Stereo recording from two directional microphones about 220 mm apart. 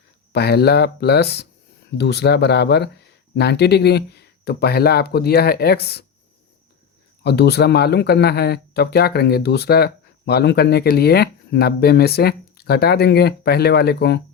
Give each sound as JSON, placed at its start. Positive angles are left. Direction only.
{"t": 0.3, "sound": "speech", "side_deg": 50}
{"t": 7.3, "sound": "speech", "side_deg": 50}